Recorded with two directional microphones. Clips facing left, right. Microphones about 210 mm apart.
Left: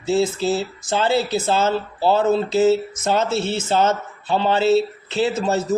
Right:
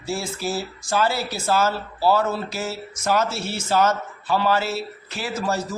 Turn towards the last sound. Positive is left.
turn(degrees=25)  # may be behind; listen again after turning